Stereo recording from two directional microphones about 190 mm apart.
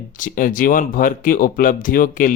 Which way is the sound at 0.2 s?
45° left (ahead or behind).